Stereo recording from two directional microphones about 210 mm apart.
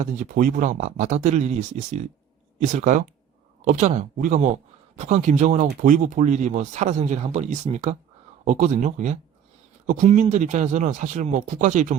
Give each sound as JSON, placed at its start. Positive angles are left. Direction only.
{"t": 0.0, "sound": "speech", "side_deg": -40}